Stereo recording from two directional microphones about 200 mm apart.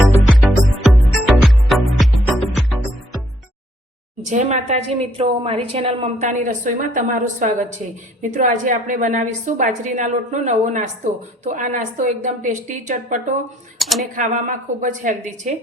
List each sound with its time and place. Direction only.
0.9 s music: centre (ahead or behind)
4.2 s a woman's voice: 35° right (ahead or behind)
13.7 s speech: centre (ahead or behind)
14.2 s a woman's voice: 40° right (ahead or behind)